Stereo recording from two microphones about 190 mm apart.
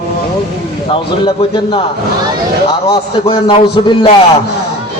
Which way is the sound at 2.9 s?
30° left (ahead or behind).